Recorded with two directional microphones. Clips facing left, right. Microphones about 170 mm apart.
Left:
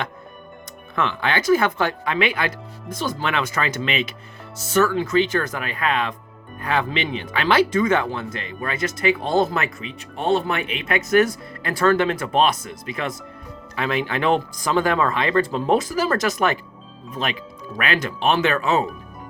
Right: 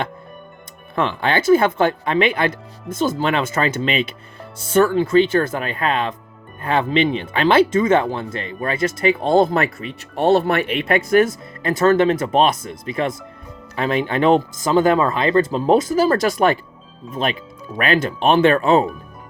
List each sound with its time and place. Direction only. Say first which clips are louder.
0.9 s speech: right 3 dB; 30° right (ahead or behind)
9.8 s speech: right 6 dB; 70° right (ahead or behind)
10.9 s speech: right 2 dB; 25° right (ahead or behind)
17.2 s speech: right 4 dB; 45° right (ahead or behind)